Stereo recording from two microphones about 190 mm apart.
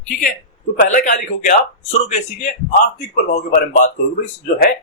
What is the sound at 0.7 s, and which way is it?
A man's voice, 40° left (ahead or behind).